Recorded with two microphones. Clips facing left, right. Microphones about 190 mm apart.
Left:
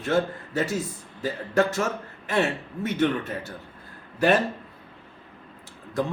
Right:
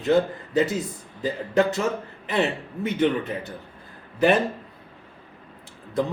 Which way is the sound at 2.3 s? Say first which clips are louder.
Even; 15° right (ahead or behind).